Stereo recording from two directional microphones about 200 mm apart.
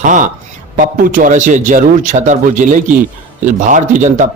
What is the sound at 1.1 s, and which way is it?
A man's voice, 40° right (ahead or behind).